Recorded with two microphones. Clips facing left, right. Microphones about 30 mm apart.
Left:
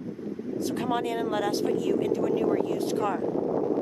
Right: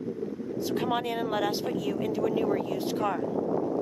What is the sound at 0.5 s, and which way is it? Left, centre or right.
Speech, centre.